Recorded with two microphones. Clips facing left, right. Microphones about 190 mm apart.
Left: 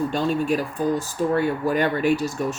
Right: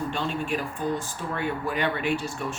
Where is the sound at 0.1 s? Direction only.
40° left (ahead or behind).